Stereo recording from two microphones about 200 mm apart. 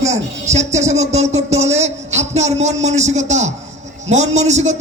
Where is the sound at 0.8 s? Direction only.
35° right (ahead or behind).